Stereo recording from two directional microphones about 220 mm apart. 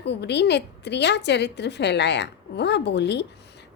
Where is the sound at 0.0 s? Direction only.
50° left (ahead or behind).